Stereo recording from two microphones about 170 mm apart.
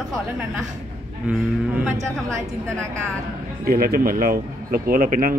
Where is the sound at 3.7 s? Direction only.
60° right (ahead or behind).